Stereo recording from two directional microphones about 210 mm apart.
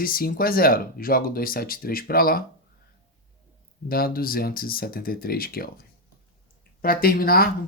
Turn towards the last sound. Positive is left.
turn(degrees=45)  # may be behind; listen again after turning